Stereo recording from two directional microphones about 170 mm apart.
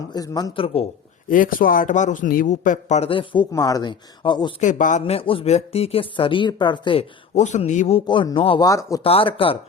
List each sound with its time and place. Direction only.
0.1 s speech: 20° left (ahead or behind)
1.3 s a man's voice: 55° left (ahead or behind)
3.1 s speech: 30° left (ahead or behind)
4.6 s speech: 45° left (ahead or behind); by 7.0 s 30° left (ahead or behind)
7.3 s a man's voice: 45° left (ahead or behind)
8.0 s speech: 25° left (ahead or behind)